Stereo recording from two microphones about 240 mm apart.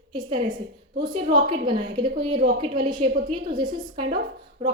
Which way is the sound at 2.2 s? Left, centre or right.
Right.